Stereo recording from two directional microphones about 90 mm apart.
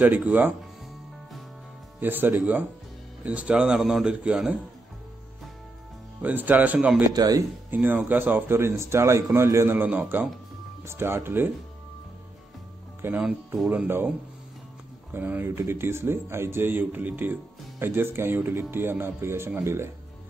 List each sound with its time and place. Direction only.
0.0 s speech: 20° right (ahead or behind)
2.0 s speech: 20° right (ahead or behind)
6.2 s speech: 20° right (ahead or behind)
7.2 s speech: 45° right (ahead or behind)
7.7 s speech: 20° right (ahead or behind)
9.8 s speech: 20° right (ahead or behind)
13.0 s speech: 25° right (ahead or behind)
15.1 s speech: 20° right (ahead or behind)